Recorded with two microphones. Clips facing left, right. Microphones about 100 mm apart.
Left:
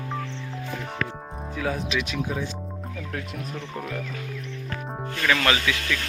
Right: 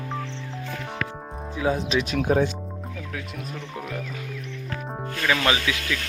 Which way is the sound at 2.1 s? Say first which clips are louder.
Right 8 dB; 60° right (ahead or behind).